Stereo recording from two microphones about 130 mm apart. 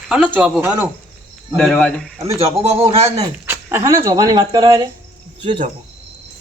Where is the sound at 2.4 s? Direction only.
50° right (ahead or behind).